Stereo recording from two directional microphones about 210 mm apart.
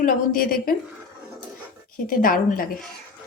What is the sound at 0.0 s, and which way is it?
Speech, 40° left (ahead or behind).